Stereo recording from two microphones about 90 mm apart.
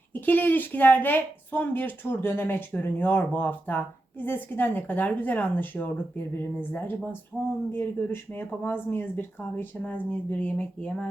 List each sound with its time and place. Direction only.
0.1 s speech: 20° left (ahead or behind)
7.3 s speech: 10° right (ahead or behind)
7.7 s speech: 25° left (ahead or behind)